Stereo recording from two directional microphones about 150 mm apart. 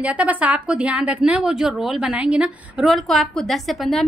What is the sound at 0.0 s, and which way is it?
A woman's voice, 10° right (ahead or behind).